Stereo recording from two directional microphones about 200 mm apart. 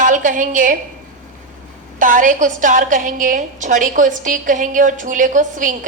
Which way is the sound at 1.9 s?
40° right (ahead or behind).